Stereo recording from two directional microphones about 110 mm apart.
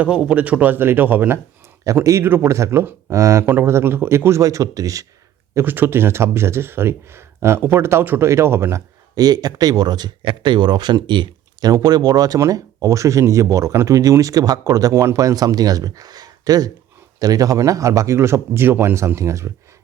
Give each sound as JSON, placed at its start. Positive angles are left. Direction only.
{"t": 0.2, "sound": "speech", "side_deg": -10}
{"t": 5.5, "sound": "speech", "side_deg": -20}
{"t": 9.1, "sound": "speech", "side_deg": -35}